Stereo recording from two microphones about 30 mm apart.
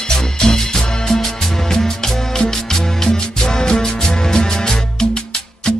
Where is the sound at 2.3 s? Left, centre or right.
Centre.